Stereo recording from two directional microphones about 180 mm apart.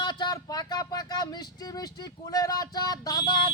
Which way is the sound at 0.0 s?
25° left (ahead or behind).